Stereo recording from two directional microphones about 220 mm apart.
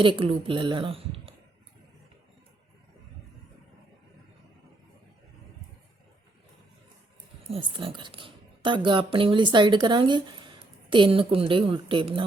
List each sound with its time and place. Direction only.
0.0 s speech: 25° right (ahead or behind)
7.5 s speech: 25° right (ahead or behind)